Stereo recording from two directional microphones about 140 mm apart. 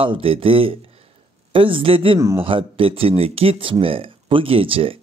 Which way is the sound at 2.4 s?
40° right (ahead or behind).